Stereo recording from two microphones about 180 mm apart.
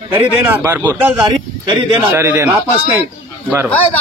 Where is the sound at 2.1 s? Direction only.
15° right (ahead or behind).